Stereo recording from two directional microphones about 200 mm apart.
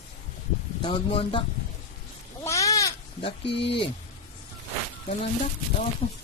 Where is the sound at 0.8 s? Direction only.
25° left (ahead or behind).